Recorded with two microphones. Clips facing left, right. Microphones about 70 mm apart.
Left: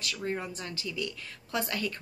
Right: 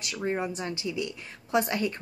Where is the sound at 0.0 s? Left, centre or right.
Right.